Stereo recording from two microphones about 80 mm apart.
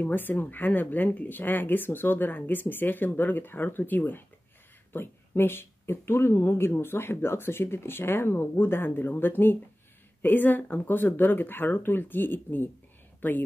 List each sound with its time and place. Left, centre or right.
0.0 s speech: left